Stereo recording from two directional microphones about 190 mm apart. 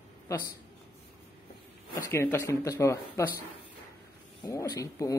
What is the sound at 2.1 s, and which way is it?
Speech, 15° left (ahead or behind).